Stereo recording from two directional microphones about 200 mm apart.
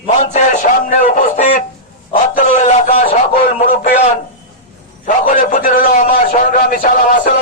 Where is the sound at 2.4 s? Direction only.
35° left (ahead or behind).